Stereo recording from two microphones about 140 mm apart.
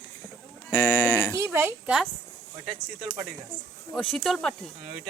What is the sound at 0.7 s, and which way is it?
Livestock, 15° left (ahead or behind).